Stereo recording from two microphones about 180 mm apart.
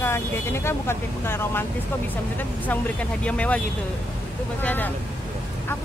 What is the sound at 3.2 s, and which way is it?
Speech, 5° left (ahead or behind).